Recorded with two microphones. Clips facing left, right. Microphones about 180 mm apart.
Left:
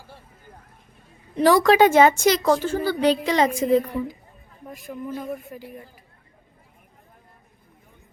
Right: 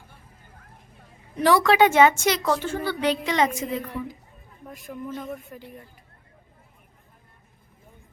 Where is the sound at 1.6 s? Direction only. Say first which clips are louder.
Left 2 dB; 40° left (ahead or behind).